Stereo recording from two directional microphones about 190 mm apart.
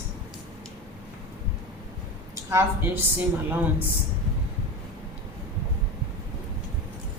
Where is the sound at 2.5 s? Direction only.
10° right (ahead or behind).